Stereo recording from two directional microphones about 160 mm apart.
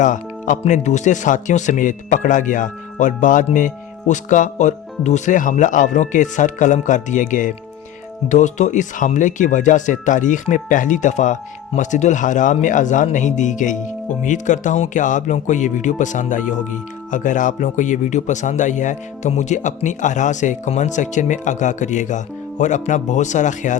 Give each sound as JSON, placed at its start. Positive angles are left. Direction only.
{"t": 0.0, "sound": "speech", "side_deg": 50}